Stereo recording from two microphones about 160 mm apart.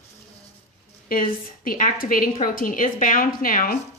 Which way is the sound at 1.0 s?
60° left (ahead or behind).